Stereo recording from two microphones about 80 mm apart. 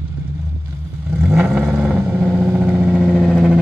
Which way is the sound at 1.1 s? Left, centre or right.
Centre.